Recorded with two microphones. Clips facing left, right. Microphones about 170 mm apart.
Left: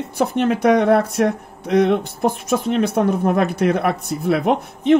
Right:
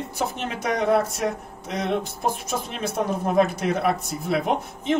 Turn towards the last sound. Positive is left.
turn(degrees=60)  # may be behind; listen again after turning